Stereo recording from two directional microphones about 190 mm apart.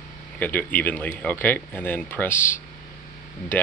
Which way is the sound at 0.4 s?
10° left (ahead or behind).